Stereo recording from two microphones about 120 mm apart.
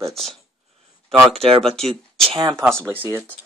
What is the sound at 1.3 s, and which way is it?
Speech, 55° right (ahead or behind).